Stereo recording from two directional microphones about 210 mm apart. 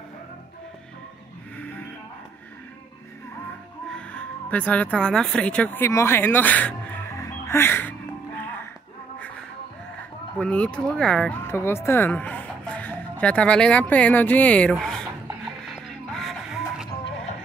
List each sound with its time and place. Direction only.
3.9 s speech: 5° left (ahead or behind)
10.4 s speech: 5° left (ahead or behind)
15.6 s music: centre (ahead or behind)